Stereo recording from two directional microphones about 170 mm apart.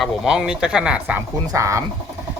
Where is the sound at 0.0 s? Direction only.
5° right (ahead or behind).